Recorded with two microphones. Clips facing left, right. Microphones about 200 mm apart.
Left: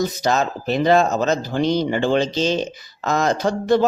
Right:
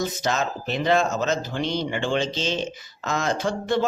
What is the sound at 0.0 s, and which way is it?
Speech, 35° left (ahead or behind).